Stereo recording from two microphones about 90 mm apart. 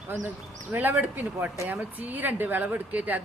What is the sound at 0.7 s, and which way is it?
A woman's voice, 20° right (ahead or behind).